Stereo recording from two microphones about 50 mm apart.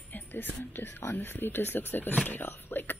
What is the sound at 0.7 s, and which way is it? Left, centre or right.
Speech, left.